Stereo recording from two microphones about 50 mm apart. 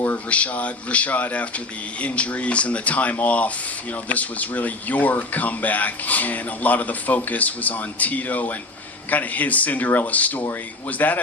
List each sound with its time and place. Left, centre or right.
0.3 s speech: left